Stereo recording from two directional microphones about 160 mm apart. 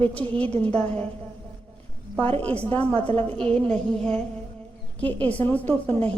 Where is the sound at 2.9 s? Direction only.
35° right (ahead or behind).